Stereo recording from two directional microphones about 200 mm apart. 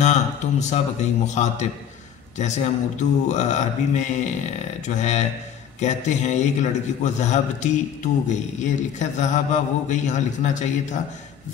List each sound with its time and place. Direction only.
0.0 s a man's voice: 35° left (ahead or behind)